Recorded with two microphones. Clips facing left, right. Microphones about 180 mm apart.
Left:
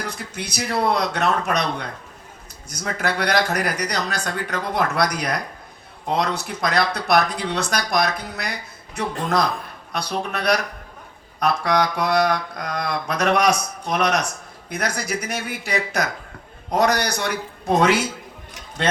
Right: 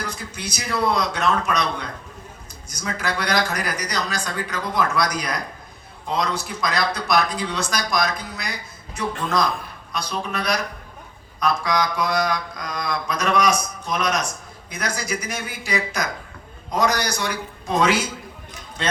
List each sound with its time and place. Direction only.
0.3 s mantra: 60° left (ahead or behind)
2.6 s mantra: 60° left (ahead or behind)
9.9 s mantra: 65° left (ahead or behind)